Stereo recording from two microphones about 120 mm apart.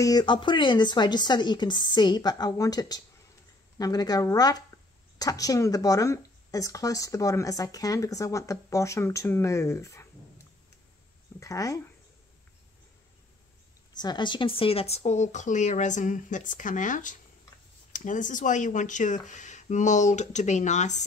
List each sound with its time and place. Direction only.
0.0 s speech: 35° left (ahead or behind)
11.3 s speech: 30° left (ahead or behind)
13.9 s speech: 40° left (ahead or behind); by 21.0 s 80° left